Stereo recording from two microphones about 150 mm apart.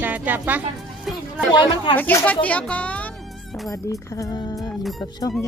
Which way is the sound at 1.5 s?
35° left (ahead or behind).